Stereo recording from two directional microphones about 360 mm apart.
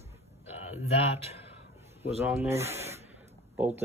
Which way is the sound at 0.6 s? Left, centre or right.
Centre.